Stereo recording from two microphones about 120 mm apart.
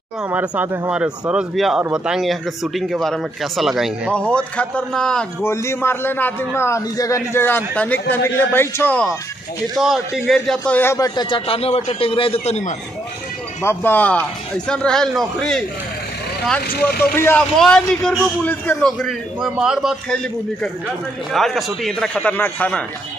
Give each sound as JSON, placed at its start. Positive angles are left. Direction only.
{"t": 0.2, "sound": "speech", "side_deg": -15}
{"t": 4.1, "sound": "a man's voice", "side_deg": 10}
{"t": 5.4, "sound": "a man's voice", "side_deg": 20}
{"t": 9.8, "sound": "speech", "side_deg": 0}
{"t": 10.7, "sound": "a man's voice", "side_deg": 20}
{"t": 11.0, "sound": "a man's voice", "side_deg": 40}
{"t": 13.6, "sound": "a man's voice", "side_deg": 20}
{"t": 17.6, "sound": "a man's voice", "side_deg": 5}
{"t": 18.9, "sound": "speech", "side_deg": 0}
{"t": 21.3, "sound": "speech", "side_deg": 0}